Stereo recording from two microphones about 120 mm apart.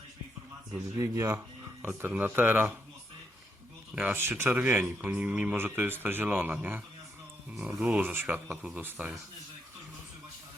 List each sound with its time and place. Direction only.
0.9 s a man's voice: 20° right (ahead or behind)
3.9 s a man's voice: 15° right (ahead or behind)
8.4 s a man's voice: 5° right (ahead or behind)